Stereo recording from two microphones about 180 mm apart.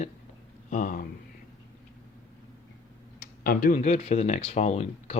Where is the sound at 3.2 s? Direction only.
55° left (ahead or behind).